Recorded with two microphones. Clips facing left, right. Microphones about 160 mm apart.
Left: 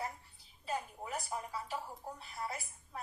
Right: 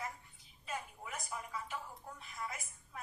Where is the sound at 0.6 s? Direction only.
35° left (ahead or behind).